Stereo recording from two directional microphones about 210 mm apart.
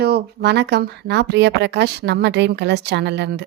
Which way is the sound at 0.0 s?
50° right (ahead or behind).